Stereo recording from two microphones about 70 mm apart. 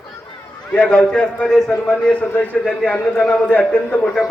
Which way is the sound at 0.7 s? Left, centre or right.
Centre.